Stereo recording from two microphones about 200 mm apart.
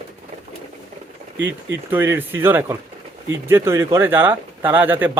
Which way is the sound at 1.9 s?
10° right (ahead or behind).